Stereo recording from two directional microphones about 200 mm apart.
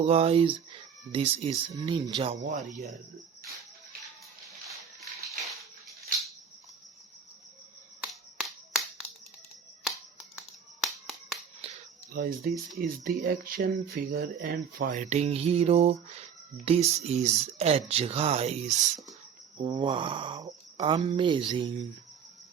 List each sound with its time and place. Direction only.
0.0 s speech: 30° right (ahead or behind)
2.4 s speech: 40° right (ahead or behind)
8.0 s finger snapping: centre (ahead or behind)
10.3 s a sound: centre (ahead or behind)
11.6 s a sound: 30° right (ahead or behind)
12.1 s speech: 45° right (ahead or behind); by 18.5 s 30° right (ahead or behind)
19.5 s speech: 25° right (ahead or behind)